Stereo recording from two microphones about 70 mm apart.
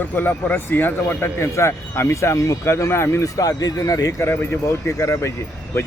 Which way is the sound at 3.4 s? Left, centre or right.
Left.